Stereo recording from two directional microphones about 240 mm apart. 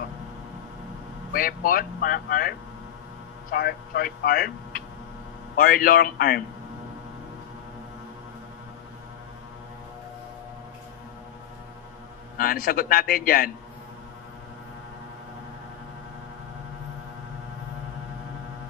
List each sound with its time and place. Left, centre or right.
1.3 s a man's voice: left
12.4 s a man's voice: left